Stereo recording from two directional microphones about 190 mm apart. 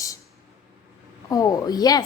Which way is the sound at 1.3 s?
20° left (ahead or behind).